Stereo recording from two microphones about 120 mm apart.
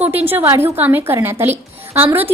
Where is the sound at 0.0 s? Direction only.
15° right (ahead or behind).